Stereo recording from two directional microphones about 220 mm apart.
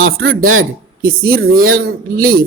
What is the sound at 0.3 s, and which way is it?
Speech, 70° right (ahead or behind).